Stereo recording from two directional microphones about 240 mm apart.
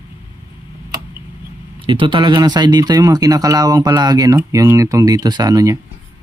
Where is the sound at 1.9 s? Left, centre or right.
Right.